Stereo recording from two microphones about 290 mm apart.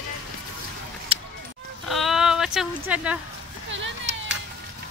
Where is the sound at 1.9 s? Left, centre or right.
Centre.